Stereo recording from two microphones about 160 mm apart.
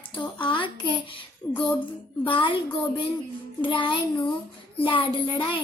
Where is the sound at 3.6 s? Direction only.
30° left (ahead or behind).